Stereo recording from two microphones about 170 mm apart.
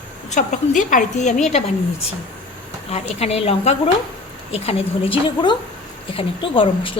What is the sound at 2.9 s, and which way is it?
A woman's voice, 40° left (ahead or behind).